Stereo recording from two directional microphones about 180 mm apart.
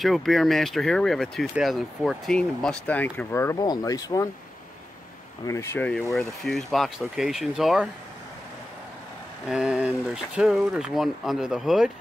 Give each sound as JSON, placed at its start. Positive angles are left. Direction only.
{"t": 0.0, "sound": "speech", "side_deg": 0}
{"t": 5.5, "sound": "speech", "side_deg": 15}
{"t": 6.1, "sound": "speech", "side_deg": 0}
{"t": 9.5, "sound": "speech", "side_deg": 0}